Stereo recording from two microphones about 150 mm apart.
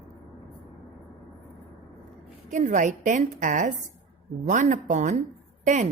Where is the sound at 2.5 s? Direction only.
55° right (ahead or behind).